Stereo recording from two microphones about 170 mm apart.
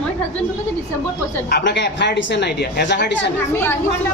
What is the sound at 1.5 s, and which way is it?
A woman's voice, 80° left.